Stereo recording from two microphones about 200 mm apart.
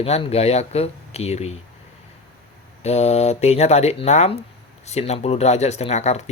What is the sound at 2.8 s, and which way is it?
Speech, 35° left (ahead or behind).